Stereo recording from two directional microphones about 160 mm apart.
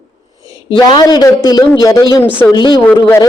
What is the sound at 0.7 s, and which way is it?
A man's voice, 30° left (ahead or behind).